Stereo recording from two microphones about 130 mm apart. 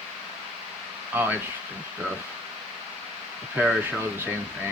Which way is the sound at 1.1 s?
15° right (ahead or behind).